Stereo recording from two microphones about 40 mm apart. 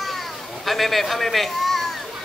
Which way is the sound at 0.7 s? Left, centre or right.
Centre.